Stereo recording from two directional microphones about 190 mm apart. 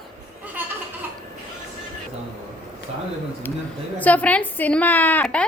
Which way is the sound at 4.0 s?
10° left (ahead or behind).